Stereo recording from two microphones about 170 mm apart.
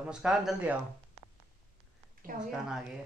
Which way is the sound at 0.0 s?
5° right (ahead or behind).